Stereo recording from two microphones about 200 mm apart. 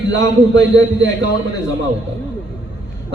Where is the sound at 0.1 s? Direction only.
60° right (ahead or behind).